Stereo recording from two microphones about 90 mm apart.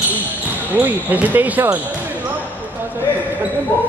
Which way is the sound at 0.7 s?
20° right (ahead or behind).